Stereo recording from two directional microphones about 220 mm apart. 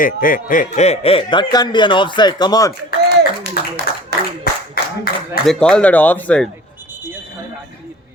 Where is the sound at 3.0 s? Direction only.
50° right (ahead or behind).